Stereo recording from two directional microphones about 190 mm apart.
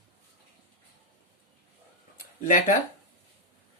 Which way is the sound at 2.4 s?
40° left (ahead or behind).